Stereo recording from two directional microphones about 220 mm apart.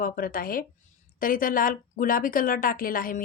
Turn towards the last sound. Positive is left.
turn(degrees=40)  # may be behind; listen again after turning